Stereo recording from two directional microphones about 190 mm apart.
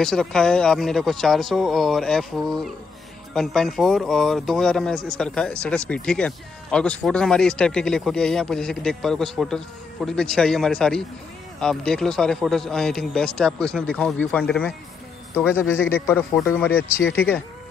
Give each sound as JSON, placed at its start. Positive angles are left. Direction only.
{"t": 0.0, "sound": "a man's voice", "side_deg": 5}
{"t": 17.0, "sound": "speech", "side_deg": 65}